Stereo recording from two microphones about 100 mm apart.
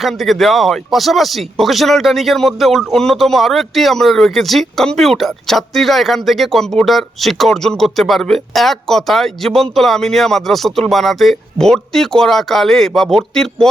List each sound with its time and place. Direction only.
0.0 s speech: centre (ahead or behind)